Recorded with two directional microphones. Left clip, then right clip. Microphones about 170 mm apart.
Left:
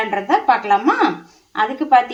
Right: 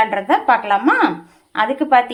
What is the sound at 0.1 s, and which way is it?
A woman's voice, 25° right (ahead or behind).